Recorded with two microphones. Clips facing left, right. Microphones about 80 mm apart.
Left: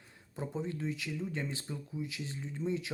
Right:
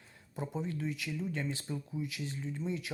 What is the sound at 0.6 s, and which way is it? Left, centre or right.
Speech, left.